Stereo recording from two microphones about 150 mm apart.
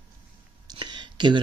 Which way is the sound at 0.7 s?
30° right (ahead or behind).